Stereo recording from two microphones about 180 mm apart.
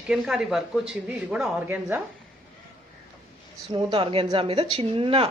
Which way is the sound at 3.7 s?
25° right (ahead or behind).